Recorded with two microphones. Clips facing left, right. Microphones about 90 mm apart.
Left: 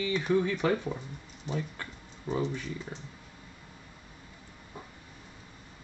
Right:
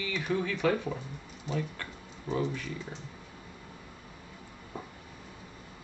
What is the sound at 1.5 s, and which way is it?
Speech, 15° left (ahead or behind).